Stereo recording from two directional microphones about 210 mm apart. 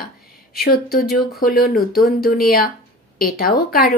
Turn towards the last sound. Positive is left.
turn(degrees=45)  # may be behind; listen again after turning